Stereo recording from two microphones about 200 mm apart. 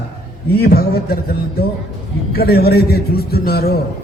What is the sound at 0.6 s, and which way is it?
Speech, 50° left (ahead or behind).